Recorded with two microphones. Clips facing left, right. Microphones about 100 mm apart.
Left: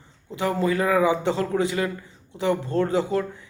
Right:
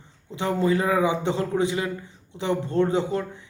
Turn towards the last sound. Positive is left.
turn(degrees=-20)  # may be behind; listen again after turning